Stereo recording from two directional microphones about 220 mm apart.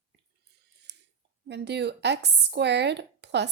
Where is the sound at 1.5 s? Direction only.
50° right (ahead or behind).